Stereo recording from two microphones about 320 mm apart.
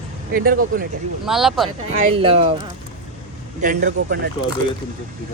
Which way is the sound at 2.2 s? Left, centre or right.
Centre.